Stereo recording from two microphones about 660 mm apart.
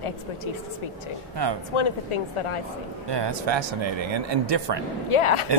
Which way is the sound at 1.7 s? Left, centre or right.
Left.